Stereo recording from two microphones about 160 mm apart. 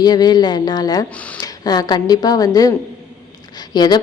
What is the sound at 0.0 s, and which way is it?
A woman's voice, 25° left (ahead or behind).